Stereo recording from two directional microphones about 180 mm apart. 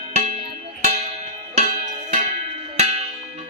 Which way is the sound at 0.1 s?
40° right (ahead or behind).